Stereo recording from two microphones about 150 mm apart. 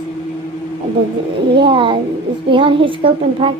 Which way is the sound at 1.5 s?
35° right (ahead or behind).